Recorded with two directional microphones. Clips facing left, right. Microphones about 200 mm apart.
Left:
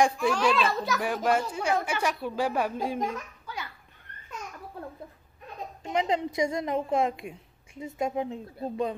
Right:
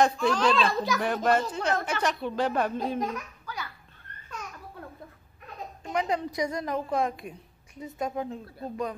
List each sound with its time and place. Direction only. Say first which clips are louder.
0.0 s speech: even; 10° left (ahead or behind)
5.9 s a woman's voice: left 1 dB; 20° left (ahead or behind)